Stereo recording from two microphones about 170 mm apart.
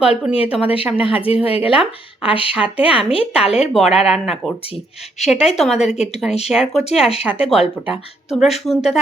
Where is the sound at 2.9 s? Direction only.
35° left (ahead or behind).